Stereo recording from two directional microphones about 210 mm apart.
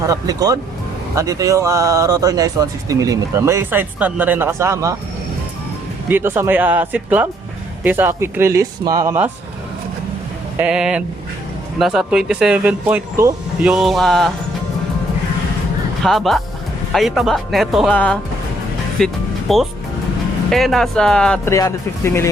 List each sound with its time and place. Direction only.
0.1 s speech: 15° right (ahead or behind)
6.1 s speech: 10° right (ahead or behind)
10.6 s speech: 5° right (ahead or behind)
16.0 s speech: centre (ahead or behind)
18.9 s music: centre (ahead or behind)
20.5 s speech: centre (ahead or behind)